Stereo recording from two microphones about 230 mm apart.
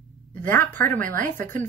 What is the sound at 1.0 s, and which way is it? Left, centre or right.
Speech, right.